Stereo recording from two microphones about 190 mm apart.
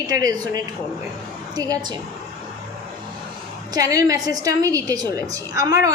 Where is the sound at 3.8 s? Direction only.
20° right (ahead or behind).